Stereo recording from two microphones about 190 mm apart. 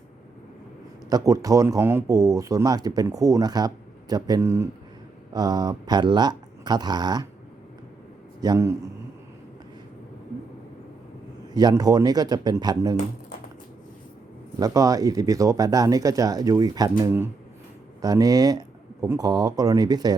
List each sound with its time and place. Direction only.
1.1 s speech: 20° right (ahead or behind)
8.4 s speech: 20° right (ahead or behind)
11.5 s speech: 20° right (ahead or behind)
14.6 s speech: 20° right (ahead or behind)